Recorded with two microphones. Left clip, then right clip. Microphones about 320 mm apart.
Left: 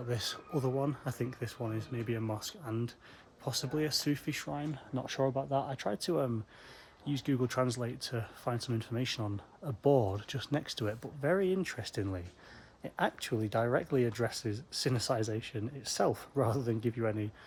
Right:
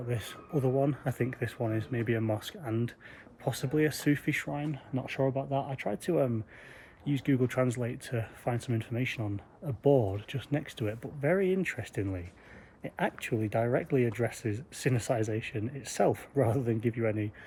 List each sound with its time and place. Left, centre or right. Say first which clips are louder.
0.1 s speech: even; centre
9.8 s speech: right 2 dB; left
10.1 s speech: right 1 dB; centre